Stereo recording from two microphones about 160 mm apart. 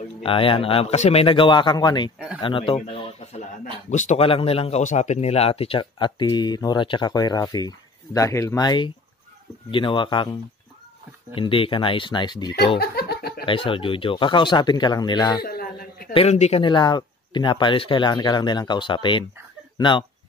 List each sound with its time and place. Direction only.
0.2 s speech: 35° left (ahead or behind)
2.1 s speech: 5° right (ahead or behind)
2.4 s a sound: 35° left (ahead or behind)
3.9 s speech: 45° left (ahead or behind); by 12.5 s 30° left (ahead or behind)
12.7 s music: 80° left
13.5 s speech: 35° left (ahead or behind)
15.4 s a sound: 70° left (ahead or behind)
16.1 s speech: 40° left (ahead or behind)